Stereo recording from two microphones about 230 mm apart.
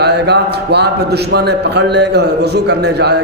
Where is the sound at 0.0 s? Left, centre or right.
Right.